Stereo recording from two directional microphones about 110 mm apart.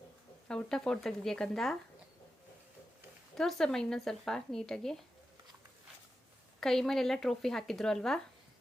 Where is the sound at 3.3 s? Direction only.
5° left (ahead or behind).